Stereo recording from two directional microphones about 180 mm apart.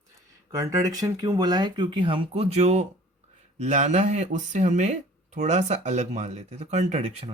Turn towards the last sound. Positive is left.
turn(degrees=-35)  # may be behind; listen again after turning